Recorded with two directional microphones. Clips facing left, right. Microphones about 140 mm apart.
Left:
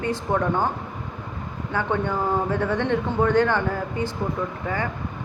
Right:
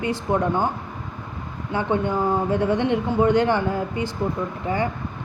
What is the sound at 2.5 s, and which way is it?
A woman's voice, 15° right (ahead or behind).